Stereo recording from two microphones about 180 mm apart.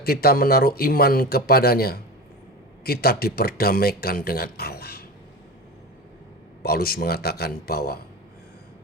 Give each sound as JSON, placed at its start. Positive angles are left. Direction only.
{"t": 0.0, "sound": "speech", "side_deg": 55}
{"t": 6.6, "sound": "speech", "side_deg": 55}